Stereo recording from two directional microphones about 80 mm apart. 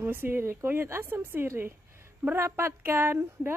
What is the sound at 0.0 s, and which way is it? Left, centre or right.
A woman's voice, right.